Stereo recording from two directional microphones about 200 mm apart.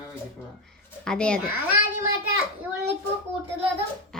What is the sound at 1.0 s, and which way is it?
Speech, 5° left (ahead or behind).